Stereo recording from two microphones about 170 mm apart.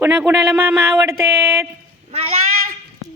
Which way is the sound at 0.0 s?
10° right (ahead or behind).